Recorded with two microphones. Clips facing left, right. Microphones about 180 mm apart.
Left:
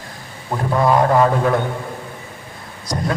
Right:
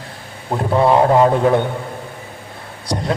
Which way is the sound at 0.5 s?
25° right (ahead or behind).